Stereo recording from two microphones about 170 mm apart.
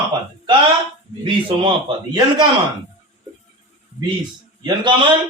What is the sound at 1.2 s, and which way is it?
Speech, 30° right (ahead or behind).